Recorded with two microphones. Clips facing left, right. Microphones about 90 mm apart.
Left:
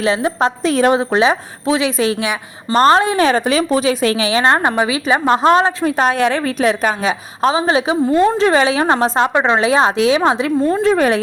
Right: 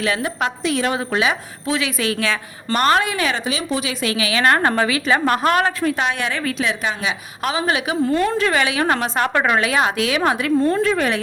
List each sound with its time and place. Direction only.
0.0 s a woman's voice: 25° left (ahead or behind)
2.7 s a woman's voice: 30° left (ahead or behind)
10.8 s a woman's voice: 30° left (ahead or behind)